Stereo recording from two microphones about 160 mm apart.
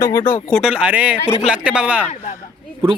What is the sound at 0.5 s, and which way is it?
Speech, 5° right (ahead or behind).